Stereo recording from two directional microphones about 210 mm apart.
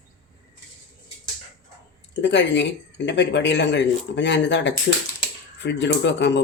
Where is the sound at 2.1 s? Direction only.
55° left (ahead or behind).